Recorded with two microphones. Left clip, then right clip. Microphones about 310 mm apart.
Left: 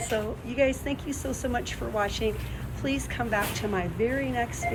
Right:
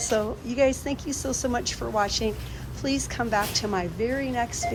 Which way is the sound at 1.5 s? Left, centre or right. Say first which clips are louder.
Right 1 dB; centre.